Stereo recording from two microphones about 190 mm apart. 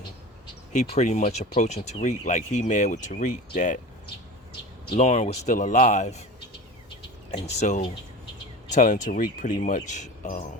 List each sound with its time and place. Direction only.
0.7 s speech: 35° left (ahead or behind)
4.9 s speech: 35° left (ahead or behind)
7.6 s speech: 35° left (ahead or behind)